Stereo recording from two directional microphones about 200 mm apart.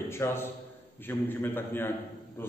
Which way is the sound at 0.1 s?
10° left (ahead or behind).